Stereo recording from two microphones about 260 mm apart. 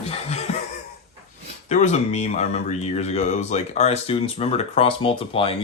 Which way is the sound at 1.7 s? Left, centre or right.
Left.